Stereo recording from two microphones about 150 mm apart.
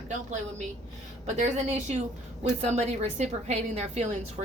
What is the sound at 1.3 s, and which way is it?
A woman's voice, 50° right (ahead or behind).